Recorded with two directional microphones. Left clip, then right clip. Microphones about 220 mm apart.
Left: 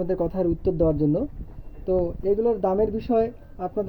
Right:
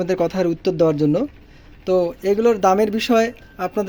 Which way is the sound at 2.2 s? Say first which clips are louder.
Right 7 dB; 20° right (ahead or behind).